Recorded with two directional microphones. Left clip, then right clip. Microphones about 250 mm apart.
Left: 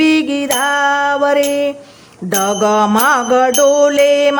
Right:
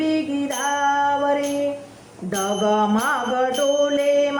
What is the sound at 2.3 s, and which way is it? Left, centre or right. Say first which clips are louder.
Music: left 7 dB; left.